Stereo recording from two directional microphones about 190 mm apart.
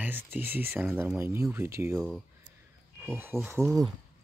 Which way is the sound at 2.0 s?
Centre (ahead or behind).